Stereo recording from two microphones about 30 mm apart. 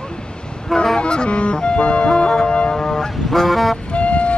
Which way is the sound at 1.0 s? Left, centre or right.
Left.